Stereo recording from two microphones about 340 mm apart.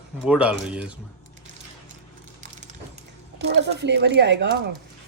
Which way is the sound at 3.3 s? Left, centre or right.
Right.